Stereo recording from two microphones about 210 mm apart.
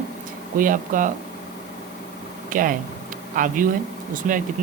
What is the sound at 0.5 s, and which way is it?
Speech, 40° right (ahead or behind).